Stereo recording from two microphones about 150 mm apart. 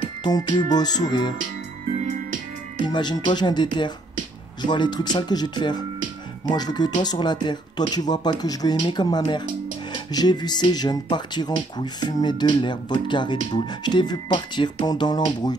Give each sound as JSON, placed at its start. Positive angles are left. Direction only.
{"t": 0.2, "sound": "speech", "side_deg": 30}
{"t": 2.8, "sound": "speech", "side_deg": 30}